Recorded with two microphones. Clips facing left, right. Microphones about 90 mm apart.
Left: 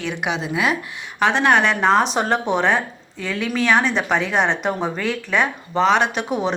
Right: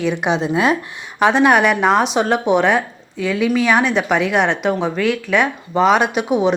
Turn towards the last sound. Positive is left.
turn(degrees=-5)  # may be behind; listen again after turning